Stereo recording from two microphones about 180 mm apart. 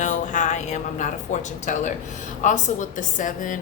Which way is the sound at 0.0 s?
45° left (ahead or behind).